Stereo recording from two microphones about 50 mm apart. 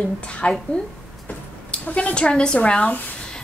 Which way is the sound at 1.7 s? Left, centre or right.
Left.